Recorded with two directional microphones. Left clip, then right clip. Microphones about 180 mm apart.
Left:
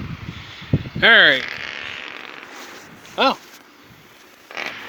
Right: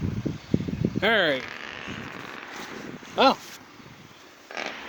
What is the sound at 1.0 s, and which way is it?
Speech, centre (ahead or behind).